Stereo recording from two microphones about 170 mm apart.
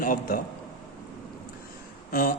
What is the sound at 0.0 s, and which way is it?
Speech, 55° left (ahead or behind).